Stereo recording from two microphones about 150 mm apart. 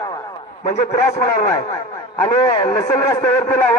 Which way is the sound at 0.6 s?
55° left (ahead or behind).